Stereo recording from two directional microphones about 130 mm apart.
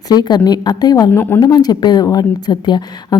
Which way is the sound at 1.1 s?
15° left (ahead or behind).